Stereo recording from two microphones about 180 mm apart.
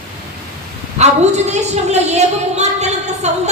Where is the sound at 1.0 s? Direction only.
40° right (ahead or behind).